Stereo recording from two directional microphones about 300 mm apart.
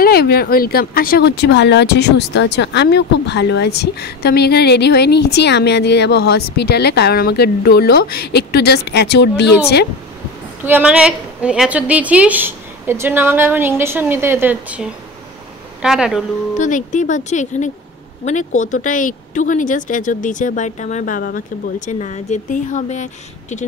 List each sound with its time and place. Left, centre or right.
0.0 s speech: left
10.6 s a woman's voice: centre
16.5 s speech: left